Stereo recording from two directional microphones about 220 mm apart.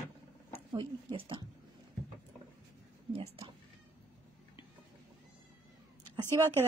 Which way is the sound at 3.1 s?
25° right (ahead or behind).